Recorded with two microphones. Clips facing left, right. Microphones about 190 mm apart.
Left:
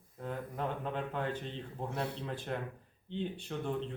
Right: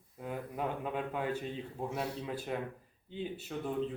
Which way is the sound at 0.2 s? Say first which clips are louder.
Right 1 dB; 10° right (ahead or behind).